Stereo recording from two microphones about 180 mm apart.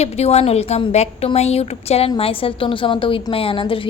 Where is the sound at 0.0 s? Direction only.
35° left (ahead or behind).